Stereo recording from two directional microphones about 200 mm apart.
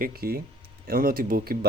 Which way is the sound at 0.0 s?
50° right (ahead or behind).